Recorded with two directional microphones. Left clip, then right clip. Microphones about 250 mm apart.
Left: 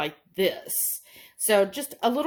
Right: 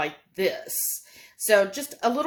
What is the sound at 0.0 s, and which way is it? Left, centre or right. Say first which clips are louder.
Speech: even; left.